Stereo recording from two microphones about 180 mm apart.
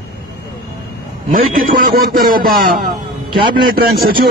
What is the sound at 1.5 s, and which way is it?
A man's voice, 50° right (ahead or behind).